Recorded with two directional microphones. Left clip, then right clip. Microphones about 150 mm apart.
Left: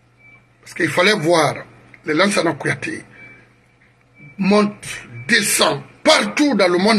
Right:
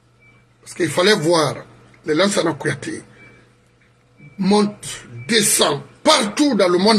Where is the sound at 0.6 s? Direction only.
15° right (ahead or behind).